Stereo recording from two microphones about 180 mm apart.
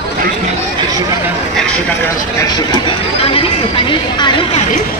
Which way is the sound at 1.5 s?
5° left (ahead or behind).